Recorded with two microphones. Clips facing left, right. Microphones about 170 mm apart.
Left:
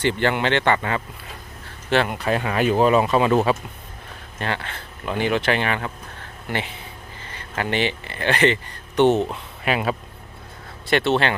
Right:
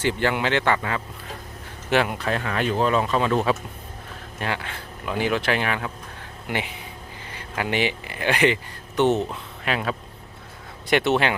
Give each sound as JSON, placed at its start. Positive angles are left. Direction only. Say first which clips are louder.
{"t": 0.0, "sound": "speech", "louder": "left 2 dB", "side_deg": -5}
{"t": 2.0, "sound": "speech", "louder": "left 3 dB", "side_deg": 5}
{"t": 4.4, "sound": "speech", "louder": "left 1 dB", "side_deg": -10}
{"t": 10.8, "sound": "speech", "louder": "even", "side_deg": -15}